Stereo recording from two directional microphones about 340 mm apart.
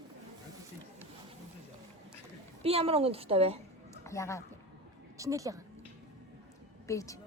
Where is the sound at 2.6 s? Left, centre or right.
Centre.